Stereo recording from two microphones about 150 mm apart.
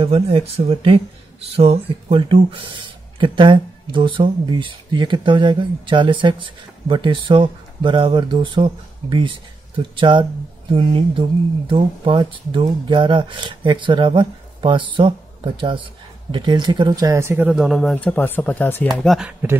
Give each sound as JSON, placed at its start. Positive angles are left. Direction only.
{"t": 0.0, "sound": "speech", "side_deg": -40}
{"t": 17.5, "sound": "speech", "side_deg": 0}